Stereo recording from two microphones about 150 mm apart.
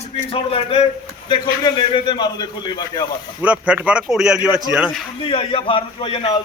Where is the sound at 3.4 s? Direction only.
10° right (ahead or behind).